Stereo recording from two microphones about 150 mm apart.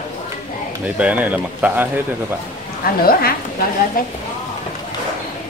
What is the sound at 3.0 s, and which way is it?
A woman's voice, 80° left.